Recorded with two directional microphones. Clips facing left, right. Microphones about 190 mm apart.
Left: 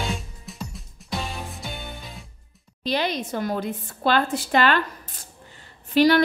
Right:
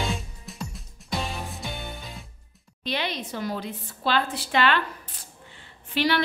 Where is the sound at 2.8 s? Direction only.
40° left (ahead or behind).